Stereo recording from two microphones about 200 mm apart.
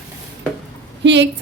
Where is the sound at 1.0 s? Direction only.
60° right (ahead or behind).